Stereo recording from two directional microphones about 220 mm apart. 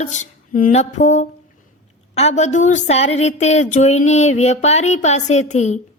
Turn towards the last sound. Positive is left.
turn(degrees=30)  # may be behind; listen again after turning